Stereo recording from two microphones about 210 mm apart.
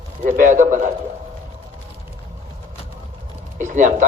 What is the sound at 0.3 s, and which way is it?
Speech, 35° right (ahead or behind).